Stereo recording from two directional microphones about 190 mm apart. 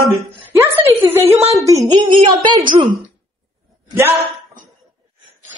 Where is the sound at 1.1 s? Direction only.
15° right (ahead or behind).